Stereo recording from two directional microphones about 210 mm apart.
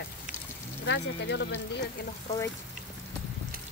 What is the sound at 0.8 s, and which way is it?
Speech, 55° left (ahead or behind).